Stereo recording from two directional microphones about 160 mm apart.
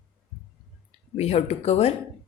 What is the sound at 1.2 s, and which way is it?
Speech, 40° left (ahead or behind).